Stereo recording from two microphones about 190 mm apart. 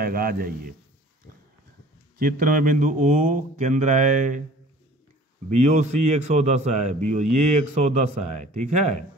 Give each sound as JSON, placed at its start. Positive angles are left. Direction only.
{"t": 0.0, "sound": "speech", "side_deg": -50}
{"t": 2.1, "sound": "speech", "side_deg": -50}
{"t": 5.5, "sound": "a man's voice", "side_deg": -40}